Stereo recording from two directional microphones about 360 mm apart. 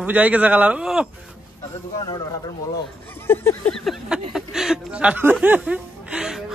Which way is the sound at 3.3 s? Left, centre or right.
Centre.